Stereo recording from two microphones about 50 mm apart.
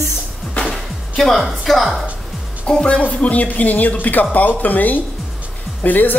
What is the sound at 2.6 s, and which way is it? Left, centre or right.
Speech, centre.